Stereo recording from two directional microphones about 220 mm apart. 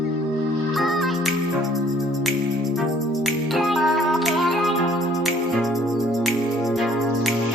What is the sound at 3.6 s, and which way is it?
Music, centre (ahead or behind).